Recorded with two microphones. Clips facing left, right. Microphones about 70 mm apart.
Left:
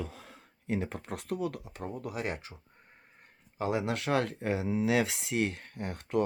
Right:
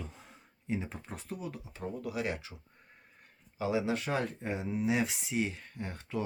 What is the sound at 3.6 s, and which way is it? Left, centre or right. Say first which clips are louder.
Speech: even; left.